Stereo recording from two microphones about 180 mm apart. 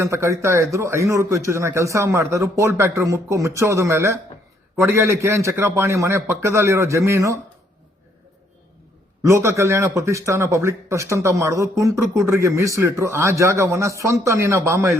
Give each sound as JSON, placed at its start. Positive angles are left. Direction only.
{"t": 0.0, "sound": "a man's voice", "side_deg": -15}
{"t": 9.2, "sound": "a man's voice", "side_deg": -15}